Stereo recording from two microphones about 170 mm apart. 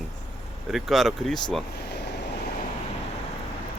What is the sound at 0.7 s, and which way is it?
Speech, centre (ahead or behind).